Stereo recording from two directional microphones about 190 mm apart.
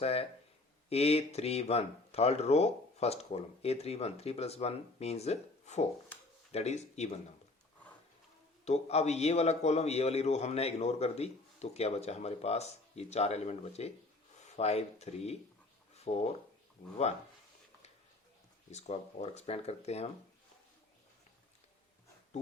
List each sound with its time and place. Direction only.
0.0 s a man's voice: 30° left (ahead or behind)
8.6 s a man's voice: 35° left (ahead or behind)
18.7 s a man's voice: 35° left (ahead or behind)